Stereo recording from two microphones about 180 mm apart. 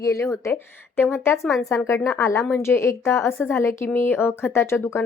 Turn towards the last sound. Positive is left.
turn(degrees=15)  # may be behind; listen again after turning